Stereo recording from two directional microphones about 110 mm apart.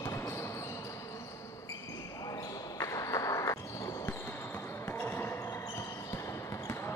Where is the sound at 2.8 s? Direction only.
30° left (ahead or behind).